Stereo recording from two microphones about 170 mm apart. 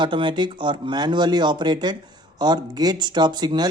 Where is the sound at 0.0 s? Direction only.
30° right (ahead or behind).